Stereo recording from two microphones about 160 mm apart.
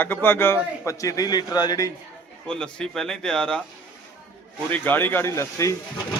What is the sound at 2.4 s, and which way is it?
A man's voice, 5° left (ahead or behind).